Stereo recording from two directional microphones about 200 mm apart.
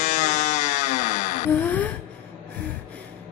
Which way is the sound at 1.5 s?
10° left (ahead or behind).